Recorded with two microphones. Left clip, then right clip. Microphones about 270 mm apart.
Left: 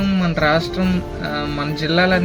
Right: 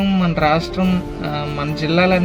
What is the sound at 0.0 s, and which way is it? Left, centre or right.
Speech, centre.